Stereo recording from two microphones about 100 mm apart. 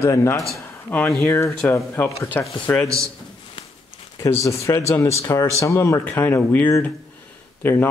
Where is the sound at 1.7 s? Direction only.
25° left (ahead or behind).